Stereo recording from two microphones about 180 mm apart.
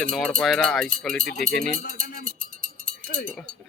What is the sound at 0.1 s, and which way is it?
Speech, 5° left (ahead or behind).